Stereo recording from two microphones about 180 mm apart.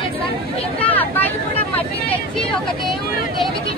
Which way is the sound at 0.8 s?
10° left (ahead or behind).